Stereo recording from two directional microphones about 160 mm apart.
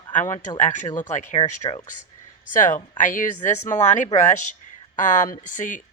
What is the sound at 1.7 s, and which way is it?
Speech, 30° left (ahead or behind).